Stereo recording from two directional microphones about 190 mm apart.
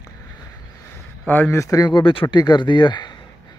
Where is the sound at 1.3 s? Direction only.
10° left (ahead or behind).